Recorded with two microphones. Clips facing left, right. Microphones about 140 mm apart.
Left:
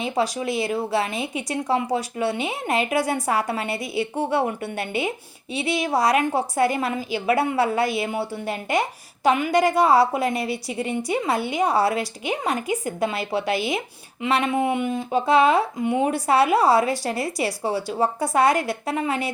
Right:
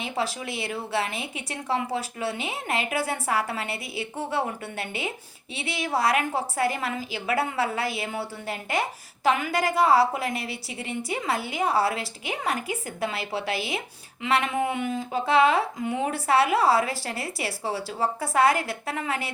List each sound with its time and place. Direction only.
0.0 s a woman's voice: 35° left (ahead or behind); by 8.8 s 15° left (ahead or behind)
9.2 s a woman's voice: 30° left (ahead or behind)